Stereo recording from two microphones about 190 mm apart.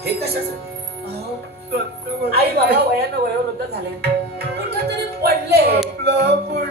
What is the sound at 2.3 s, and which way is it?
Speech, 55° right (ahead or behind).